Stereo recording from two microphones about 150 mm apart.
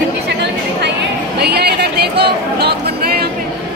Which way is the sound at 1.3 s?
90° right.